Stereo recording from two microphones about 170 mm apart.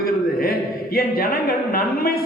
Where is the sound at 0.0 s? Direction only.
60° left (ahead or behind).